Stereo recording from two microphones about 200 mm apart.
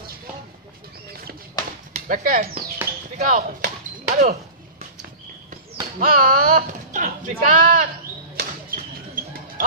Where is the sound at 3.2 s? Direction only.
45° right (ahead or behind).